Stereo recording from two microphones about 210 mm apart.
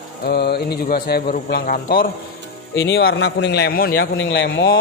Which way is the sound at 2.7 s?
60° left (ahead or behind).